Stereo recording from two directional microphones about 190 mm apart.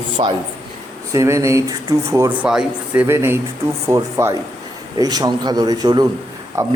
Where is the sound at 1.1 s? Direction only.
15° right (ahead or behind).